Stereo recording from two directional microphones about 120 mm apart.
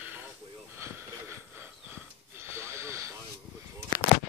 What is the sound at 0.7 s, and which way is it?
Wheeze, 20° right (ahead or behind).